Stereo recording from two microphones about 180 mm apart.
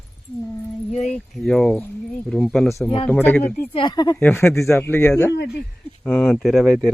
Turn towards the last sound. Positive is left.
turn(degrees=5)  # may be behind; listen again after turning